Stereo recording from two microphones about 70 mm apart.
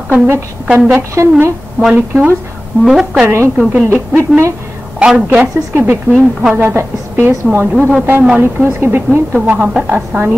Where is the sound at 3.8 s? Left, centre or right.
Right.